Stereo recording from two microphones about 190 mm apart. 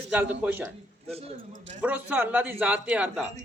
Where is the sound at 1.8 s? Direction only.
10° right (ahead or behind).